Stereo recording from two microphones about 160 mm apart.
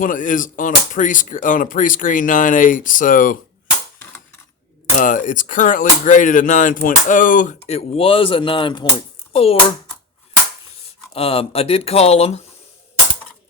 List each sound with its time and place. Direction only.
0.0 s speech: 55° left (ahead or behind)
4.9 s speech: 55° left (ahead or behind)
7.7 s a child's voice: 40° left (ahead or behind)
11.1 s speech: 40° left (ahead or behind)